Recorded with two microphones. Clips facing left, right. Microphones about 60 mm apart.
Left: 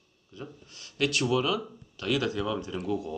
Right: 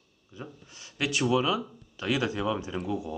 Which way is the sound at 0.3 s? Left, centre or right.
Centre.